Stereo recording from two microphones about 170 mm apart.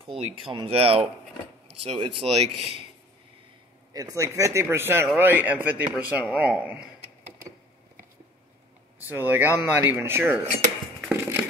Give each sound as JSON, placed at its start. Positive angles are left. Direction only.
{"t": 0.5, "sound": "speech", "side_deg": -30}
{"t": 3.9, "sound": "speech", "side_deg": -20}
{"t": 9.1, "sound": "speech", "side_deg": -10}
{"t": 11.1, "sound": "a sound", "side_deg": -15}